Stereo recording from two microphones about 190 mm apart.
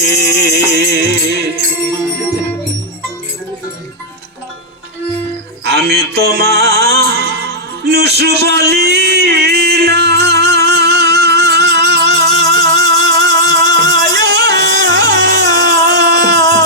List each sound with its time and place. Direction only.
0.0 s music: 60° right (ahead or behind)
5.6 s music: 60° right (ahead or behind)